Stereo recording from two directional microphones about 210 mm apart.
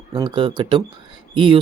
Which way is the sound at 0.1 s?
20° right (ahead or behind).